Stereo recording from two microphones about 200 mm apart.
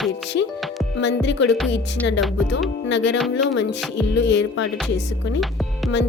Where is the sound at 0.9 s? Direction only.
60° left (ahead or behind).